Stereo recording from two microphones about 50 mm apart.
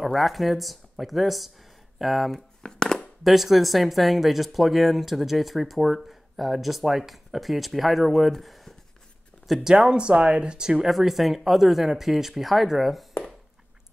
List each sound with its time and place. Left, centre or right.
0.0 s speech: centre
2.6 s a sound: centre
3.3 s speech: centre
9.5 s speech: centre
10.9 s speech: centre